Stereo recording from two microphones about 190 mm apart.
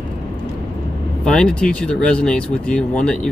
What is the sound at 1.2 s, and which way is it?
Speech, 5° left (ahead or behind).